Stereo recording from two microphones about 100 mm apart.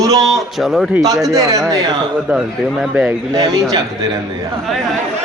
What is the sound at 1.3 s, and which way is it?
Speech, 40° right (ahead or behind).